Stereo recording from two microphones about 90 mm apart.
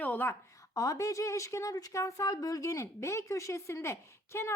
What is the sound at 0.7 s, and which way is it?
Speech, 40° left (ahead or behind).